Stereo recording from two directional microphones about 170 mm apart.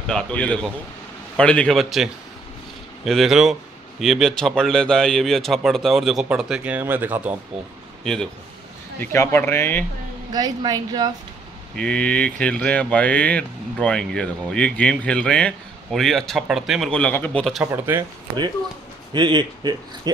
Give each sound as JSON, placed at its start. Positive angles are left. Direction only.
{"t": 0.1, "sound": "a man's voice", "side_deg": 5}
{"t": 3.1, "sound": "a man's voice", "side_deg": 0}
{"t": 8.0, "sound": "a man's voice", "side_deg": 5}
{"t": 9.0, "sound": "speech", "side_deg": 15}
{"t": 10.3, "sound": "a woman's voice", "side_deg": -25}
{"t": 11.7, "sound": "a man's voice", "side_deg": 5}
{"t": 17.6, "sound": "speech", "side_deg": -15}
{"t": 19.1, "sound": "a woman's voice", "side_deg": -25}